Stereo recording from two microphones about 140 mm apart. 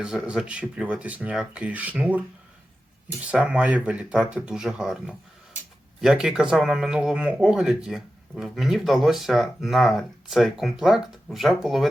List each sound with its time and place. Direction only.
0.0 s speech: 5° right (ahead or behind)